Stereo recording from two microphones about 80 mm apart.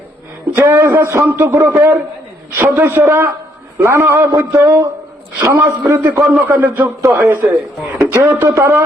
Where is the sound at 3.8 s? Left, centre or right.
Right.